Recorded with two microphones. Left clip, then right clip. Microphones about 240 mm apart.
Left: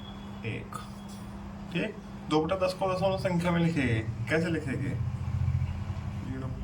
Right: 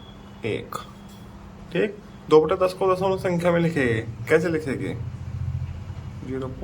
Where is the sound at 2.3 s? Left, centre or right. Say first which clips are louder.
Right 10 dB; centre.